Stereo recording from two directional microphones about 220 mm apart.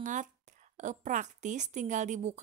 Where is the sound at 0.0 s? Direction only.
35° right (ahead or behind).